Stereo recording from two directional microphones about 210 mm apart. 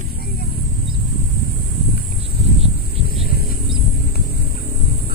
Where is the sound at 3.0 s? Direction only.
45° left (ahead or behind).